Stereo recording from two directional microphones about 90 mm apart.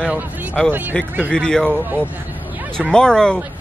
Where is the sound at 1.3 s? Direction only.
10° left (ahead or behind).